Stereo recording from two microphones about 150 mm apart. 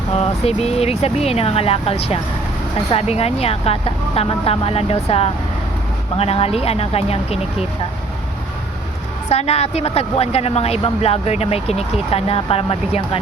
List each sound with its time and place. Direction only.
0.2 s speech: 45° left (ahead or behind)
9.3 s speech: 45° left (ahead or behind)